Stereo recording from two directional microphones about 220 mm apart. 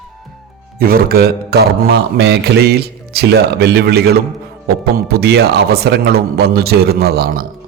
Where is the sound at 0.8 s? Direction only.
40° right (ahead or behind).